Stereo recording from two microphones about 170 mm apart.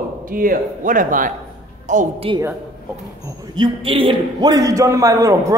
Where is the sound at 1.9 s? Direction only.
40° right (ahead or behind).